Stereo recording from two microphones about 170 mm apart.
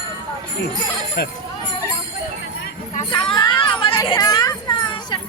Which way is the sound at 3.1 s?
25° left (ahead or behind).